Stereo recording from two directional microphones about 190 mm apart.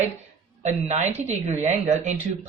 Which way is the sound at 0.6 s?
35° right (ahead or behind).